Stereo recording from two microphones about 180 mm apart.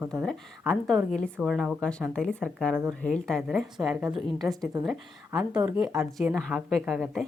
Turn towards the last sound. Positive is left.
turn(degrees=0)  # may be behind; listen again after turning